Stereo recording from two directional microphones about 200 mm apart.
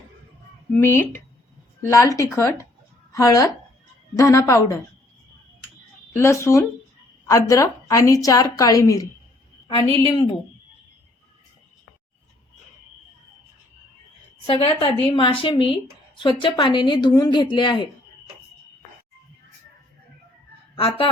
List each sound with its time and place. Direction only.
0.8 s a woman's voice: 10° left (ahead or behind)
6.1 s a woman's voice: 15° left (ahead or behind)
10.1 s speech: 25° left (ahead or behind)
14.4 s speech: 30° left (ahead or behind)